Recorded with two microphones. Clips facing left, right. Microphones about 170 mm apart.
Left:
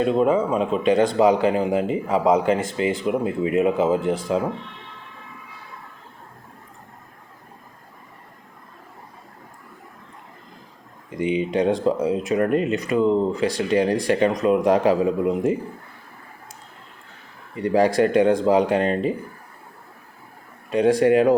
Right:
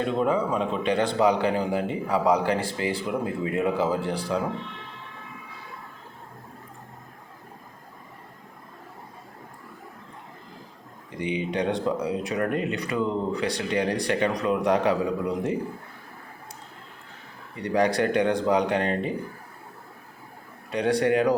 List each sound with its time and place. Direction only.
0.0 s speech: 20° left (ahead or behind)
11.2 s speech: 25° left (ahead or behind)
17.6 s speech: 25° left (ahead or behind)
20.7 s speech: 25° left (ahead or behind)